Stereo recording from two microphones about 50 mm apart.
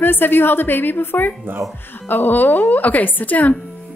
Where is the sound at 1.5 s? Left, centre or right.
Right.